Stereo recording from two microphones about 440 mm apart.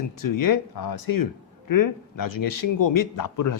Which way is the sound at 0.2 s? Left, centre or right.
Left.